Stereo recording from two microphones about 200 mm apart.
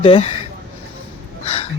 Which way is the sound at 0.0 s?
30° left (ahead or behind).